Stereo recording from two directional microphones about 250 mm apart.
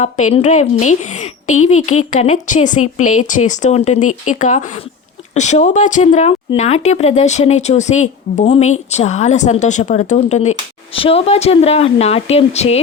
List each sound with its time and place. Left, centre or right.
0.0 s speech: left